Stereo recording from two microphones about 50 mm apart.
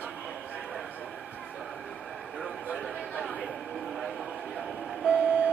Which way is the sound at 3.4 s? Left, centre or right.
Centre.